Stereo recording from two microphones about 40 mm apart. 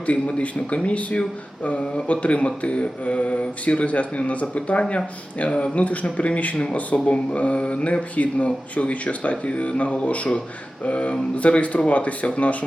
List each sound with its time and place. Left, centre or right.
0.3 s speech: left
2.2 s speech: left